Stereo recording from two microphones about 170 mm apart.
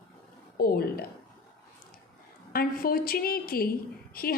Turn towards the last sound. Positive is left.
turn(degrees=60)  # may be behind; listen again after turning